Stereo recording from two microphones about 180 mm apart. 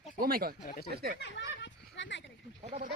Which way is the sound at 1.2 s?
85° left.